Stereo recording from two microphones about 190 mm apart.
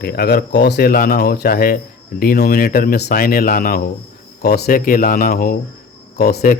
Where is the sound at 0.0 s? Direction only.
55° left (ahead or behind).